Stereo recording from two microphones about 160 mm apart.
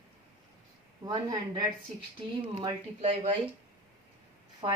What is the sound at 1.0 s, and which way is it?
Speech, 25° right (ahead or behind).